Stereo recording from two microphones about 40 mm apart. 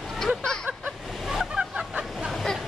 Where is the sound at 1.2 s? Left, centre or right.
Centre.